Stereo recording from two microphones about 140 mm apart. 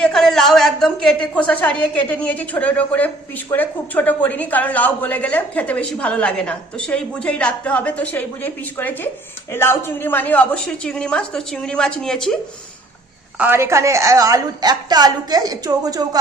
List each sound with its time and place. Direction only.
0.0 s a woman's voice: 5° left (ahead or behind)
13.4 s a woman's voice: 15° right (ahead or behind)